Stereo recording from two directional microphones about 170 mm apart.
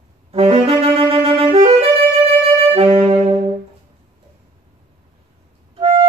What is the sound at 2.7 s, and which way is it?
Saxophone, 35° right (ahead or behind).